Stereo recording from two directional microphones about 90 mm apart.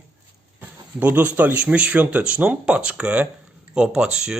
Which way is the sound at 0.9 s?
20° right (ahead or behind).